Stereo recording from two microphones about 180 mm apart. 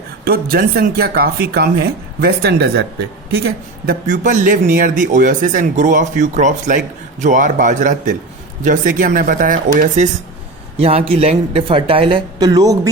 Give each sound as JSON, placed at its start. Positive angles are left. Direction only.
{"t": 0.3, "sound": "speech", "side_deg": -55}
{"t": 10.8, "sound": "speech", "side_deg": -30}